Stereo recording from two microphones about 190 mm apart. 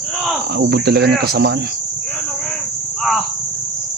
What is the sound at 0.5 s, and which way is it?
Cricket, 60° right (ahead or behind).